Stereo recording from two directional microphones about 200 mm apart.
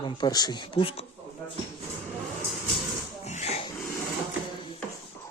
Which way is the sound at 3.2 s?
35° left (ahead or behind).